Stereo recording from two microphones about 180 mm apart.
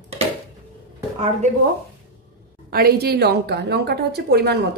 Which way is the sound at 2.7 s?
60° right (ahead or behind).